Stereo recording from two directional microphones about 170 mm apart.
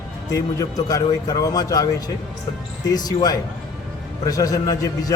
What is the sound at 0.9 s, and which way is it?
A man's voice, 20° left (ahead or behind).